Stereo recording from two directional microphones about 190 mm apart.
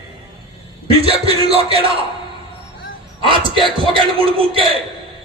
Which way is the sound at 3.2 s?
25° right (ahead or behind).